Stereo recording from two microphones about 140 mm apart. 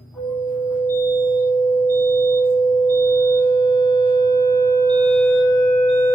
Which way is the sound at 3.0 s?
20° left (ahead or behind).